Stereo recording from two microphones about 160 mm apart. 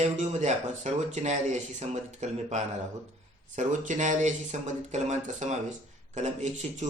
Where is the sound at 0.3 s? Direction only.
45° right (ahead or behind).